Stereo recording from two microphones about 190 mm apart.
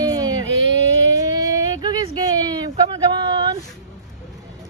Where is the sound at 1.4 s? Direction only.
20° right (ahead or behind).